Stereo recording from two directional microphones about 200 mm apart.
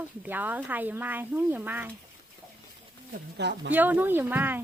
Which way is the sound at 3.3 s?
60° right (ahead or behind).